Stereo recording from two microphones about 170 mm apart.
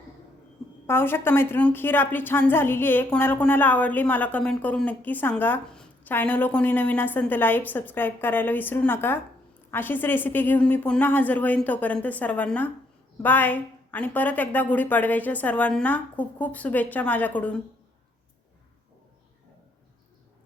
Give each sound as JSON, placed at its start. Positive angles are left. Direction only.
{"t": 0.9, "sound": "a woman's voice", "side_deg": 15}